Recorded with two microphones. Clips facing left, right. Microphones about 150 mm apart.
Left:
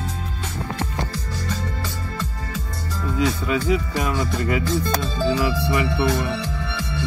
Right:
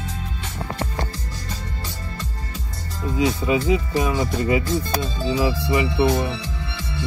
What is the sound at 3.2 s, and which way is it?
Speech, 20° right (ahead or behind).